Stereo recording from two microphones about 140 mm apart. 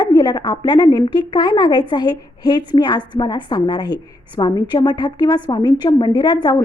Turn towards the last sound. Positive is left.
turn(degrees=30)  # may be behind; listen again after turning